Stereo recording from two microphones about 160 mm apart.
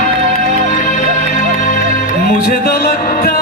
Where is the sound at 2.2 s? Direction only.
70° left (ahead or behind).